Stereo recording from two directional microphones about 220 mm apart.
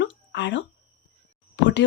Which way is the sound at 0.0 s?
55° left (ahead or behind).